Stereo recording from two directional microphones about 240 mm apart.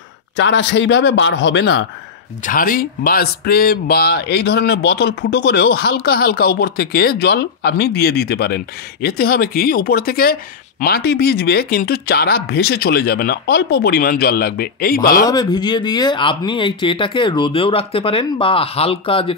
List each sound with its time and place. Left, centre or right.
0.4 s a man's voice: left
2.4 s speech: left
15.2 s speech: centre